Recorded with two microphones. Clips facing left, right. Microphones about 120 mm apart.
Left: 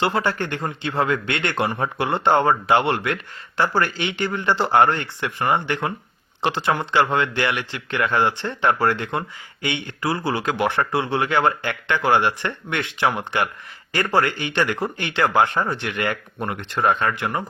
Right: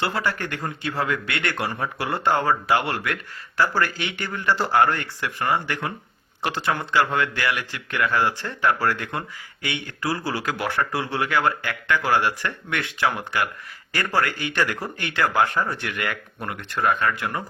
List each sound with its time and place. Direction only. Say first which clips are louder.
0.0 s speech: left 4 dB; 25° left (ahead or behind)